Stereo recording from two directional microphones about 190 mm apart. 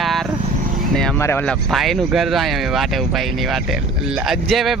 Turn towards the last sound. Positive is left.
turn(degrees=0)  # may be behind; listen again after turning